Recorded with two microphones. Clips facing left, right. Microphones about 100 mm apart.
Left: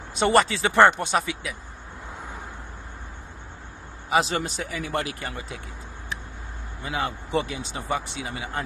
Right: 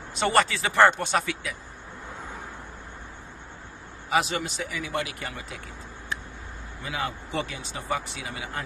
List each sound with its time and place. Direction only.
0.1 s speech: 20° left (ahead or behind)
4.1 s a man's voice: 30° left (ahead or behind)
6.8 s speech: 30° left (ahead or behind)
7.2 s speech: 20° left (ahead or behind)